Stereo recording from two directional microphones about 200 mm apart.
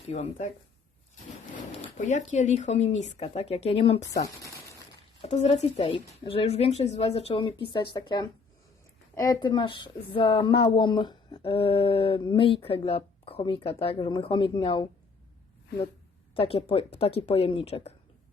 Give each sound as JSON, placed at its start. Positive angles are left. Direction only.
{"t": 0.1, "sound": "speech", "side_deg": 35}
{"t": 2.0, "sound": "speech", "side_deg": 35}
{"t": 5.2, "sound": "speech", "side_deg": 30}
{"t": 16.3, "sound": "speech", "side_deg": 30}